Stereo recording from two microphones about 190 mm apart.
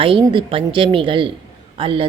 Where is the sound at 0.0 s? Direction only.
25° right (ahead or behind).